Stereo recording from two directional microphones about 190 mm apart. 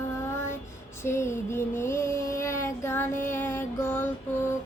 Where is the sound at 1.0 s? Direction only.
15° left (ahead or behind).